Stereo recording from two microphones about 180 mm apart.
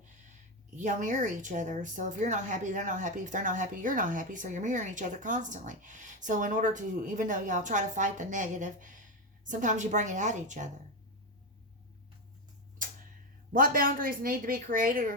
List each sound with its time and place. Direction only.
0.8 s speech: 45° right (ahead or behind)
13.5 s speech: 50° right (ahead or behind)